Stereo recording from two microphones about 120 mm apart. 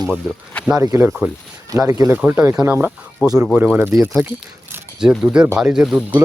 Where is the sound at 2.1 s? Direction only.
15° right (ahead or behind).